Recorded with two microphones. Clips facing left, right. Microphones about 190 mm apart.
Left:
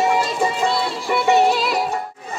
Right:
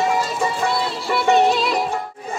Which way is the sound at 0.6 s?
10° left (ahead or behind).